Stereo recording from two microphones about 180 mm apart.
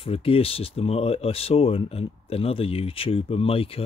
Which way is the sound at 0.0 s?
30° left (ahead or behind).